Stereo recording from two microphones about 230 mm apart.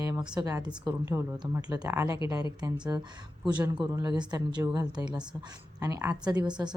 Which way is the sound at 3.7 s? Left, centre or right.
Centre.